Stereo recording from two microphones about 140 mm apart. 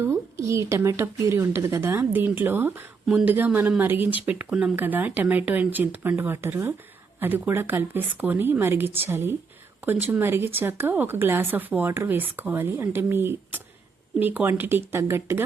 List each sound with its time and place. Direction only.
0.0 s speech: 20° right (ahead or behind)